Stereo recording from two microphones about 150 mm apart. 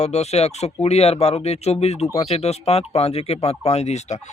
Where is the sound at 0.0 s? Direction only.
45° left (ahead or behind).